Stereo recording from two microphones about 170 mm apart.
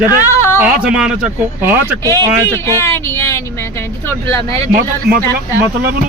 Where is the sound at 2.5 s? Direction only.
15° left (ahead or behind).